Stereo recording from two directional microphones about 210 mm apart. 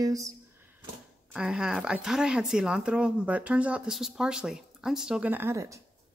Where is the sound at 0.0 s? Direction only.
15° right (ahead or behind).